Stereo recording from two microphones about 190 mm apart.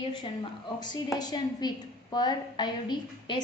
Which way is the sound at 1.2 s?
20° left (ahead or behind).